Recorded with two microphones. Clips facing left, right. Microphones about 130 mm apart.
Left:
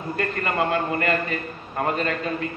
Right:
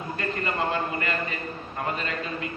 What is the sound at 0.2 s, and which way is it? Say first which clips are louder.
A man's voice: left 4 dB; 55° left (ahead or behind).